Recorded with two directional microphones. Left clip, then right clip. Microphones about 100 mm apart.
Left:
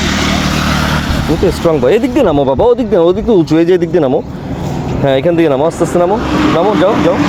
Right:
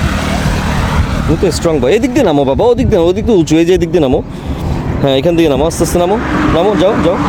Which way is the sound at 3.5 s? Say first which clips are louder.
Even; 55° right (ahead or behind).